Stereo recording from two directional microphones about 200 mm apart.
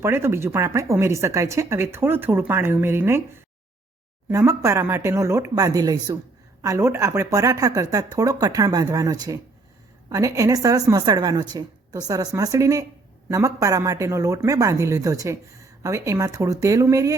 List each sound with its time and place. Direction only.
0.0 s speech: 10° right (ahead or behind)